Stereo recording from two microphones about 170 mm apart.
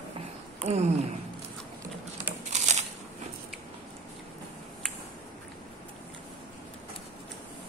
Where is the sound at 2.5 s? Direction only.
40° right (ahead or behind).